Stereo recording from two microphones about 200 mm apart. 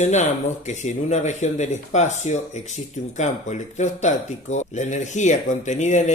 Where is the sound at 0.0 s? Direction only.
35° left (ahead or behind).